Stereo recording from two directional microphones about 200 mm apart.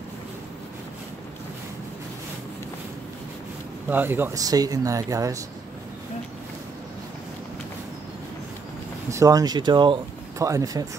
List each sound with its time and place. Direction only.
3.9 s speech: 10° right (ahead or behind)
9.1 s speech: 15° right (ahead or behind)